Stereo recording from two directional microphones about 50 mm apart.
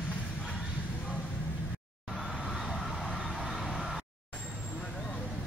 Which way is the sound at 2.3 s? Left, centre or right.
Centre.